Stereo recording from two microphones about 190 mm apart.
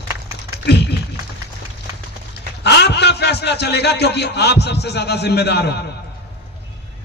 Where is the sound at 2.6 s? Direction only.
65° left (ahead or behind).